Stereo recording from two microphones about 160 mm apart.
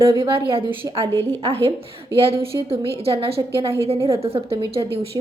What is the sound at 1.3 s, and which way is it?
A woman's voice, 40° right (ahead or behind).